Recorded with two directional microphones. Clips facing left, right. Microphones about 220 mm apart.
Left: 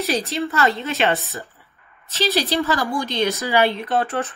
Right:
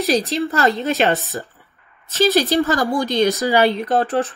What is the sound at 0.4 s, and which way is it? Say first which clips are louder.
Speech: right 3 dB; 40° right (ahead or behind).